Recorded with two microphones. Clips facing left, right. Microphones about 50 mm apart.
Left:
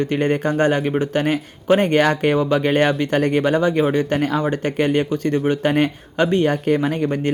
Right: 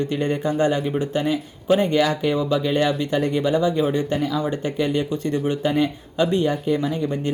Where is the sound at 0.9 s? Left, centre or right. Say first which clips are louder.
Left 3 dB; left.